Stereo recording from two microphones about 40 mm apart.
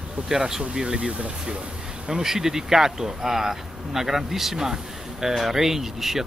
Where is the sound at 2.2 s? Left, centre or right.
Centre.